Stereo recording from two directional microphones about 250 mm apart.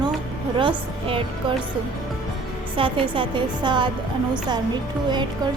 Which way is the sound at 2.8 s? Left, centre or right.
Right.